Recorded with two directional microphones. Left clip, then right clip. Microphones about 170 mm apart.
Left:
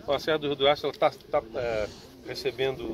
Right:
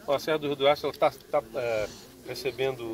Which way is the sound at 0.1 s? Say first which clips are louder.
Even; 10° right (ahead or behind).